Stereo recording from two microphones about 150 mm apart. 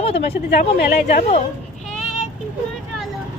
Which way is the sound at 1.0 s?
45° left (ahead or behind).